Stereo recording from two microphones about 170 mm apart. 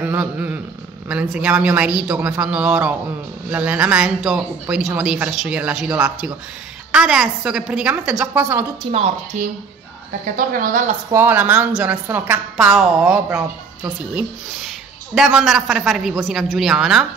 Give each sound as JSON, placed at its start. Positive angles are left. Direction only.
{"t": 0.0, "sound": "a woman's voice", "side_deg": -10}
{"t": 8.9, "sound": "a woman's voice", "side_deg": -45}
{"t": 10.2, "sound": "a woman's voice", "side_deg": -55}
{"t": 11.1, "sound": "a woman's voice", "side_deg": -10}
{"t": 15.1, "sound": "speech", "side_deg": 0}